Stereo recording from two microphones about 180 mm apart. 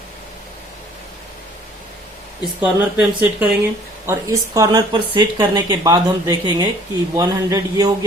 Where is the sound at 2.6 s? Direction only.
10° right (ahead or behind).